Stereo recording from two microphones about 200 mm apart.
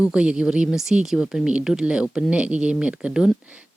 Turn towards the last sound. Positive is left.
turn(degrees=-5)  # may be behind; listen again after turning